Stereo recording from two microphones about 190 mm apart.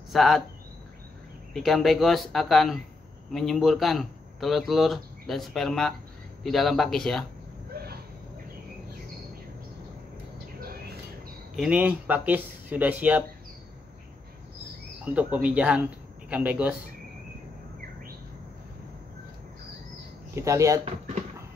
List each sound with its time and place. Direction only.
0.1 s speech: centre (ahead or behind)
1.5 s speech: centre (ahead or behind)
11.5 s speech: 5° right (ahead or behind)
15.1 s speech: 5° right (ahead or behind)
20.3 s speech: 15° right (ahead or behind)